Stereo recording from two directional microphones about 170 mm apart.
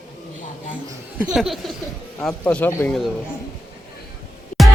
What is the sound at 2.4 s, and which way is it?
Speech, 10° left (ahead or behind).